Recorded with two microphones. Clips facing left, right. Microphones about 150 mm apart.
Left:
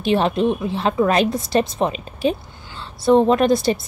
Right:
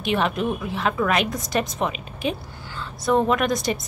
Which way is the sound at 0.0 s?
30° left (ahead or behind).